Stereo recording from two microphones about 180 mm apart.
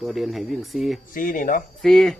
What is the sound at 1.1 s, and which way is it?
Speech, 50° left (ahead or behind).